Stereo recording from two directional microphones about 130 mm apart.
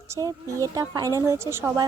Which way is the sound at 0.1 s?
25° right (ahead or behind).